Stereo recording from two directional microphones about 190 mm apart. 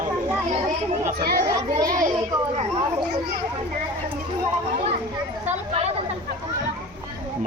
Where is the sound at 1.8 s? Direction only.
45° right (ahead or behind).